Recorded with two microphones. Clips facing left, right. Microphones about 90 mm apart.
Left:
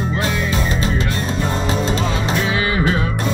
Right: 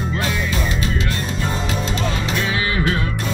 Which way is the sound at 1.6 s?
35° left (ahead or behind).